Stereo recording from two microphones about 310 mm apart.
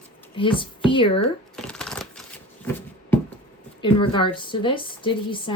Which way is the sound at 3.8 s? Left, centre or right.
Centre.